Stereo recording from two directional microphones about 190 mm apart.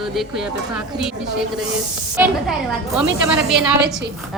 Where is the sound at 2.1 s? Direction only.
10° right (ahead or behind).